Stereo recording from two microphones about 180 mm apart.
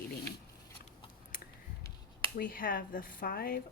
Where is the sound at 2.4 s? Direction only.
50° left (ahead or behind).